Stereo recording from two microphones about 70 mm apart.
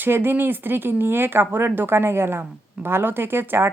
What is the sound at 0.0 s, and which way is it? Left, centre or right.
Speech, right.